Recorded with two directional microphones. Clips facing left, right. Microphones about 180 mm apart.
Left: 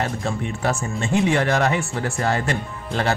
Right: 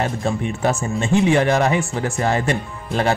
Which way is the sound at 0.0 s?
20° right (ahead or behind).